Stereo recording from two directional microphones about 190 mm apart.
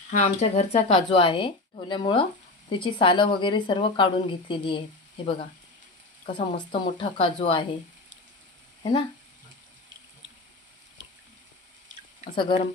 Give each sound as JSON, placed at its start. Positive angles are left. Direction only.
{"t": 0.1, "sound": "speech", "side_deg": 35}
{"t": 12.4, "sound": "speech", "side_deg": 25}